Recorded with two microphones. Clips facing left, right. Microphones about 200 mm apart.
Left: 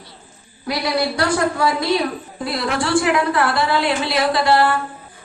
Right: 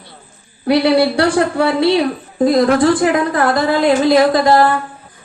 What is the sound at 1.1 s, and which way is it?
Speech, 30° right (ahead or behind).